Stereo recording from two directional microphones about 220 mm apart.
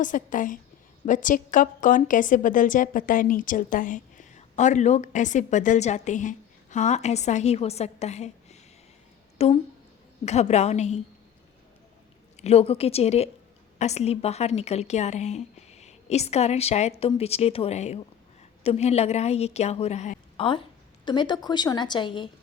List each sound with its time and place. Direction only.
0.0 s a woman's voice: 35° left (ahead or behind)
12.4 s a woman's voice: 30° left (ahead or behind)